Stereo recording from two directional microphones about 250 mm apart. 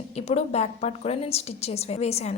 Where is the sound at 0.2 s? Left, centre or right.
Left.